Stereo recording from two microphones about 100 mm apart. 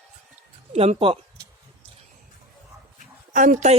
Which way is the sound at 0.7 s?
80° right.